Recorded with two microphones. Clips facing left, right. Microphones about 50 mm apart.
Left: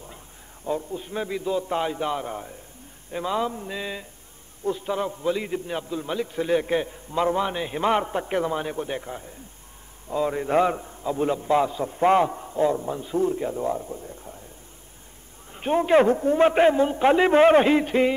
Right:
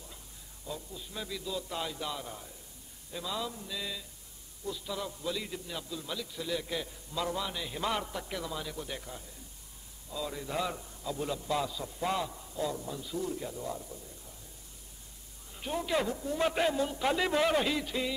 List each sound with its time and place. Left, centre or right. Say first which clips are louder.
0.7 s a man's voice: left 14 dB; left
15.5 s a man's voice: left 13 dB; left